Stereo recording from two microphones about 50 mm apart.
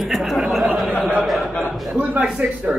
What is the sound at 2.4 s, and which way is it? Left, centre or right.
Speech, right.